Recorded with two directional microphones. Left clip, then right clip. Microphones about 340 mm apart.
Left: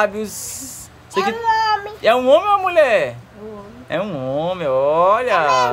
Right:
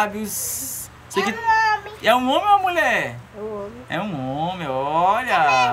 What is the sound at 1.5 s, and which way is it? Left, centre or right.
Cat, centre.